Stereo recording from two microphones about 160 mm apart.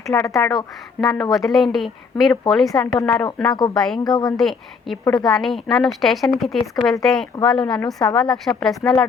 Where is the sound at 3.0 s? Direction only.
20° left (ahead or behind).